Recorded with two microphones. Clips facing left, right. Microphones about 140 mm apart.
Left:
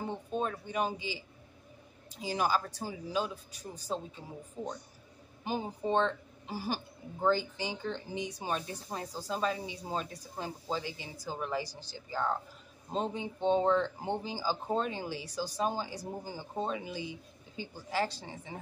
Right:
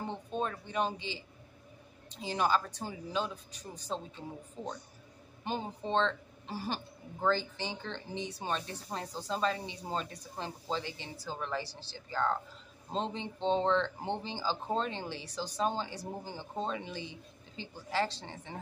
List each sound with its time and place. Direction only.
0.0 s a woman's voice: 10° left (ahead or behind)
5.4 s a woman's voice: 10° left (ahead or behind)